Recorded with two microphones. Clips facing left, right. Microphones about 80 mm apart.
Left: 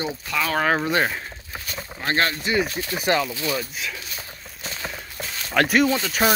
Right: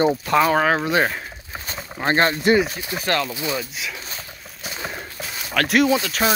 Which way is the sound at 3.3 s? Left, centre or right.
Right.